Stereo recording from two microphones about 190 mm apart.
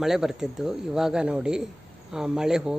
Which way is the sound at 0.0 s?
Centre (ahead or behind).